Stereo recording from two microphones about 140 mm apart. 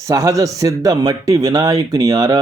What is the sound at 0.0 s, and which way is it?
Speech, 25° right (ahead or behind).